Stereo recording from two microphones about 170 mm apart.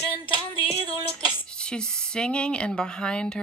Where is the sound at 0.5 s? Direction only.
35° left (ahead or behind).